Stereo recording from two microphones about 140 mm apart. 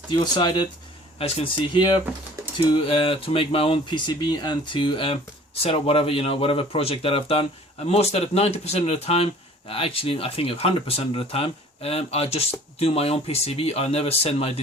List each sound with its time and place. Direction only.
0.1 s speech: 35° left (ahead or behind)